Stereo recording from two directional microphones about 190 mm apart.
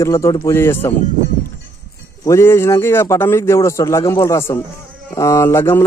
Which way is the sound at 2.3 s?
15° left (ahead or behind).